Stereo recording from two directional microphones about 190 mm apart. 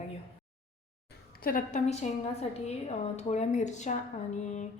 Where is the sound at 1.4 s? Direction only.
50° left (ahead or behind).